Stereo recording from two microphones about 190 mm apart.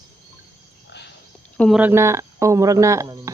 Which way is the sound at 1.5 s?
Centre (ahead or behind).